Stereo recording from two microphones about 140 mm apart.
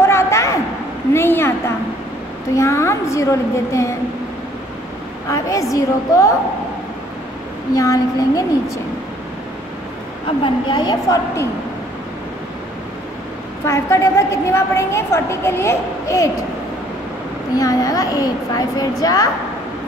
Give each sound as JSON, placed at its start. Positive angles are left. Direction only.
{"t": 0.0, "sound": "a sound", "side_deg": 20}
{"t": 2.5, "sound": "a woman's voice", "side_deg": 20}
{"t": 5.3, "sound": "a woman's voice", "side_deg": 25}
{"t": 7.7, "sound": "a woman's voice", "side_deg": 25}
{"t": 10.4, "sound": "a woman's voice", "side_deg": 30}
{"t": 13.7, "sound": "a woman's voice", "side_deg": 20}
{"t": 17.6, "sound": "a woman's voice", "side_deg": 25}